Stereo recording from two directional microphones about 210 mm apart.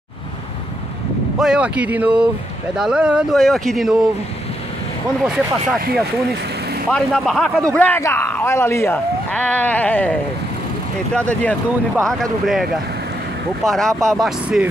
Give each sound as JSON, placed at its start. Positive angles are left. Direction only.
{"t": 1.4, "sound": "speech", "side_deg": -5}
{"t": 5.2, "sound": "speech", "side_deg": -5}
{"t": 6.9, "sound": "speech", "side_deg": 0}
{"t": 11.1, "sound": "speech", "side_deg": 5}
{"t": 13.7, "sound": "speech", "side_deg": 0}
{"t": 13.9, "sound": "speech", "side_deg": -15}
{"t": 14.2, "sound": "speech", "side_deg": 0}